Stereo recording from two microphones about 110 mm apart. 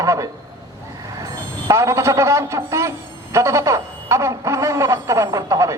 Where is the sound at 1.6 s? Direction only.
25° right (ahead or behind).